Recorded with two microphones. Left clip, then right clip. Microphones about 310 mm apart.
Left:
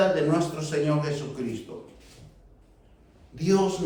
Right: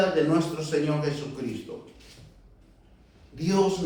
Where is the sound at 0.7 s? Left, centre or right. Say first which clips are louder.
Even; centre.